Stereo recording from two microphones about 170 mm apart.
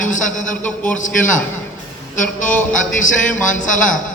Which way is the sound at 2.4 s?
45° left (ahead or behind).